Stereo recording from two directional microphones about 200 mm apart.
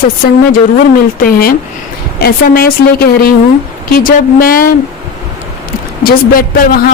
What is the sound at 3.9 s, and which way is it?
Speech, 45° left (ahead or behind).